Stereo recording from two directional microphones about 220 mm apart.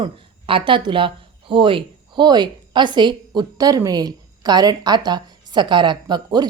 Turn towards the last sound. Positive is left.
turn(degrees=-20)  # may be behind; listen again after turning